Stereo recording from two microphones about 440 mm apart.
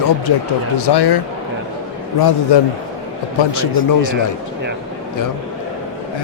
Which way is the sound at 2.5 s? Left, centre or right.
Left.